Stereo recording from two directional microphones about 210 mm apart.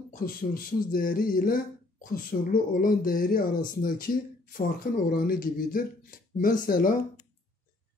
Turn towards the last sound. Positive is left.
turn(degrees=40)  # may be behind; listen again after turning